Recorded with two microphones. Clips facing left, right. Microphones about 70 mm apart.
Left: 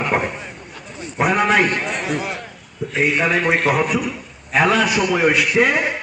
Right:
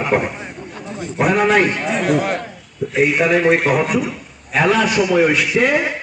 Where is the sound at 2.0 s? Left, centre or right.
Right.